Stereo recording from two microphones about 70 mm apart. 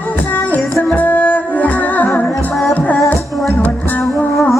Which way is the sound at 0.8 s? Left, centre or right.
Left.